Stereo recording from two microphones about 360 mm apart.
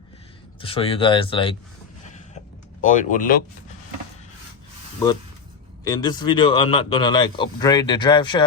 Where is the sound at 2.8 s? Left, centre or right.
Left.